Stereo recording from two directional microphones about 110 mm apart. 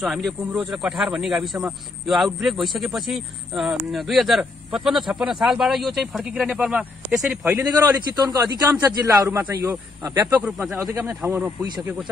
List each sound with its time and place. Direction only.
0.0 s speech: centre (ahead or behind)
7.5 s speech: 30° right (ahead or behind)
10.4 s speech: 15° right (ahead or behind)